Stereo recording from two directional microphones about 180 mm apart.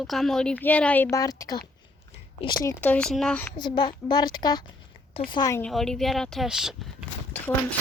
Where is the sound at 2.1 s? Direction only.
25° left (ahead or behind).